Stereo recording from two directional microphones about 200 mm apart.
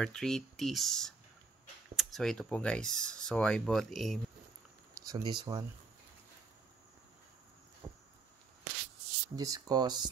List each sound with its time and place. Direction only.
0.0 s speech: 5° left (ahead or behind)
5.0 s speech: 20° right (ahead or behind)
7.8 s a sound: 10° right (ahead or behind)
9.3 s speech: 20° right (ahead or behind)